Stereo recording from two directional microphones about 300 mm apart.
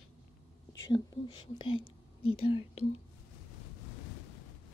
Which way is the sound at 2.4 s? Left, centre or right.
Centre.